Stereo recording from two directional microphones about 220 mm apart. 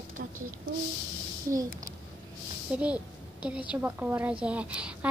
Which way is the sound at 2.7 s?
5° right (ahead or behind).